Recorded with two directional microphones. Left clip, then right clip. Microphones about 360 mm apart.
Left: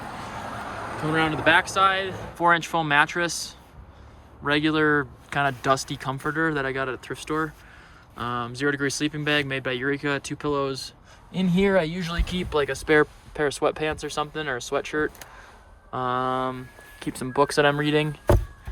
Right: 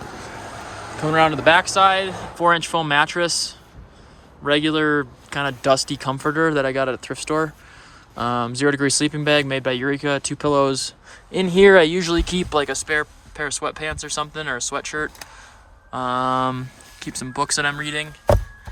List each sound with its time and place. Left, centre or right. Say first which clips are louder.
0.3 s vehicle: even; left
1.0 s speech: right 6 dB; centre
12.8 s speech: left 2 dB; centre